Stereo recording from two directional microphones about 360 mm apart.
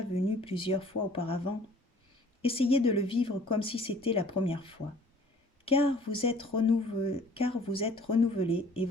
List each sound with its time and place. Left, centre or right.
0.3 s speech: centre